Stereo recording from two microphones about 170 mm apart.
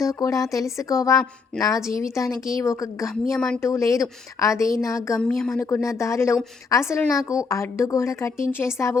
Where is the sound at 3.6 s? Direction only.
15° left (ahead or behind).